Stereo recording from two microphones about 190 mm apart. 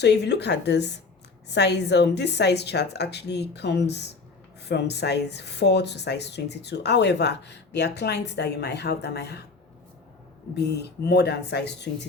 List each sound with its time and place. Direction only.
0.0 s speech: 60° left (ahead or behind)
10.5 s speech: 60° left (ahead or behind)